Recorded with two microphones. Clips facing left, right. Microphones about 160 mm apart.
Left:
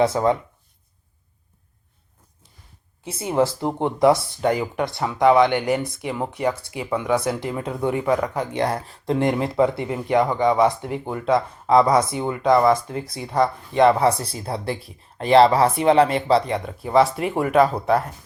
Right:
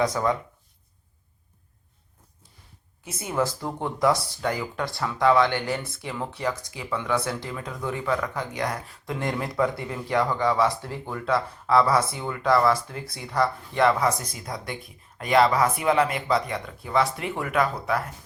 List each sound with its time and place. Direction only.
0.0 s speech: 25° left (ahead or behind)
3.0 s speech: 30° left (ahead or behind)
6.4 s speech: 30° left (ahead or behind)
7.1 s speech: 20° left (ahead or behind)
8.4 s speech: 30° left (ahead or behind)